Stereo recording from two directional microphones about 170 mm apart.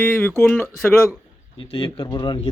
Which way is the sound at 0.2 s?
10° left (ahead or behind).